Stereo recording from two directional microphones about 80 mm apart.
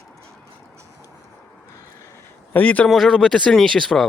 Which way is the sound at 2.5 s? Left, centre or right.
Centre.